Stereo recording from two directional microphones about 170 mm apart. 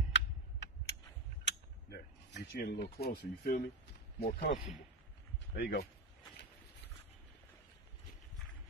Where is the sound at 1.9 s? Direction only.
75° left (ahead or behind).